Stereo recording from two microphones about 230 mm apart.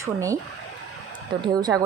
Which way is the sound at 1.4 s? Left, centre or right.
Centre.